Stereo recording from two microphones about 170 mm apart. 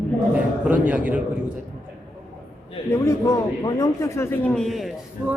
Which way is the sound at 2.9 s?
20° left (ahead or behind).